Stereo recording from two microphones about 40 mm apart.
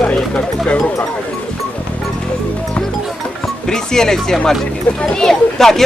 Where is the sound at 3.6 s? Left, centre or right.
Centre.